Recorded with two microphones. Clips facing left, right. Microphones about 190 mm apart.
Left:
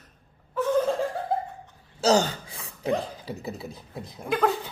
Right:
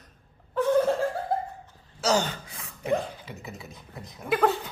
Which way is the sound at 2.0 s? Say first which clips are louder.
Left 4 dB; 30° left (ahead or behind).